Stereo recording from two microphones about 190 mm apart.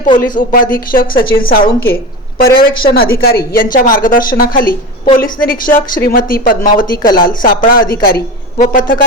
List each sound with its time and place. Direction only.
0.2 s a woman's voice: 45° left (ahead or behind)